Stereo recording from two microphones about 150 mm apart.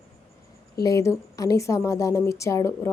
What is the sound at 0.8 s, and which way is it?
A woman's voice, 20° left (ahead or behind).